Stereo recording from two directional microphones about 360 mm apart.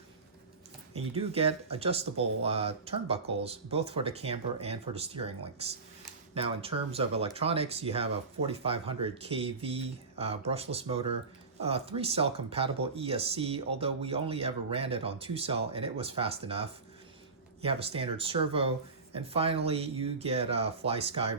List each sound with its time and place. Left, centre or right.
0.9 s speech: centre